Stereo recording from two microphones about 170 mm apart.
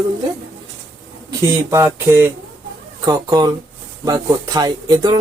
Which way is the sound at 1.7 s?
15° right (ahead or behind).